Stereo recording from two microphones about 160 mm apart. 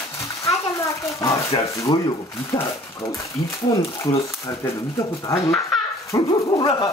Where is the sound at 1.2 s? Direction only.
20° left (ahead or behind).